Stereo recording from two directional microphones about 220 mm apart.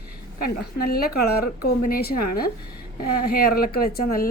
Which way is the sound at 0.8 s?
45° left (ahead or behind).